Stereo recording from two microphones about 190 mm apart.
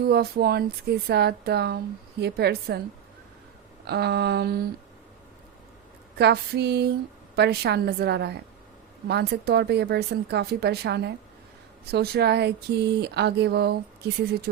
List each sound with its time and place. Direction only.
0.0 s speech: 55° right (ahead or behind)
3.8 s speech: 60° right (ahead or behind)
6.1 s speech: 60° right (ahead or behind)